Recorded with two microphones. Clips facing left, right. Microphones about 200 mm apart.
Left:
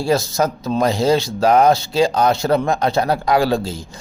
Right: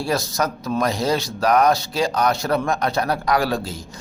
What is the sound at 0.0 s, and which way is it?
Speech, 25° left (ahead or behind).